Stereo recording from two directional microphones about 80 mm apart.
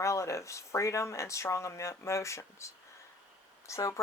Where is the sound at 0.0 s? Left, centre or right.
Left.